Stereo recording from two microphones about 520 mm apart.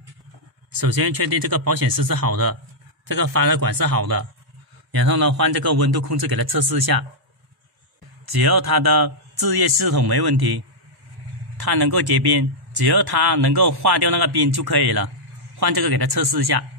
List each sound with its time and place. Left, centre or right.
0.7 s a man's voice: right
8.3 s a man's voice: right